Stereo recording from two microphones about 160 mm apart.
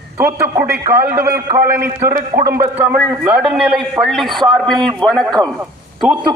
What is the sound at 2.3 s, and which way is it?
Speech, 65° right (ahead or behind).